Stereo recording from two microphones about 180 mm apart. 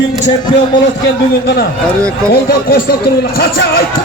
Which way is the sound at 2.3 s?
60° left (ahead or behind).